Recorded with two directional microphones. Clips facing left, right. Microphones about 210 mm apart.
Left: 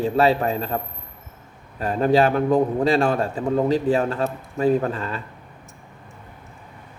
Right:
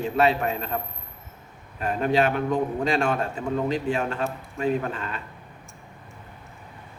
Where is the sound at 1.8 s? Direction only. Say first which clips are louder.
Left 4 dB; 35° left (ahead or behind).